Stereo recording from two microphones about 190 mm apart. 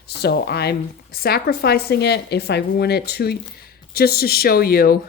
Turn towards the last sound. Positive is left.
turn(degrees=50)  # may be behind; listen again after turning